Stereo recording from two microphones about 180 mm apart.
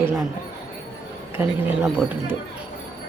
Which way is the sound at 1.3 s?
10° right (ahead or behind).